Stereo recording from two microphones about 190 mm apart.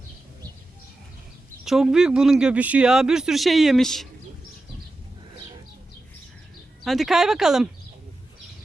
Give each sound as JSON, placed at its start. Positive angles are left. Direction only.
{"t": 1.6, "sound": "a man's voice", "side_deg": 0}
{"t": 6.8, "sound": "a man's voice", "side_deg": 0}